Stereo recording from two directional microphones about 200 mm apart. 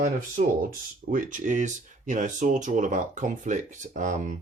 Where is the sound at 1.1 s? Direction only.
40° right (ahead or behind).